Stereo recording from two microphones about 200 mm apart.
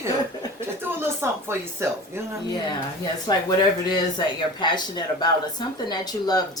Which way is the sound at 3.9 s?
20° left (ahead or behind).